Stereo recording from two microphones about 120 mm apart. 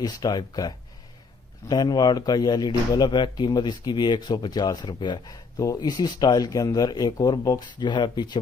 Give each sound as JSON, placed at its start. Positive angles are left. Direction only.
{"t": 0.0, "sound": "speech", "side_deg": 35}